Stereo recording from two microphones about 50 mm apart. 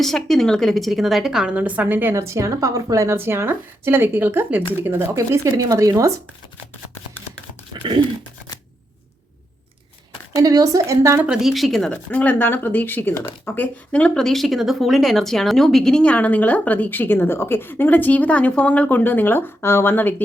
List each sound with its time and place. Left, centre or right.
0.0 s speech: centre
1.5 s a woman's voice: right
2.1 s a woman's voice: right
3.2 s speech: right
5.1 s a woman's voice: right
10.8 s a woman's voice: right
11.3 s speech: centre
12.1 s a woman's voice: left
14.1 s speech: centre
16.0 s a woman's voice: left
19.6 s speech: left